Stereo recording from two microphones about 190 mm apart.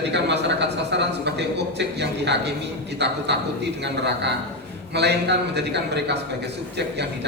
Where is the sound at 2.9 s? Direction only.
65° right (ahead or behind).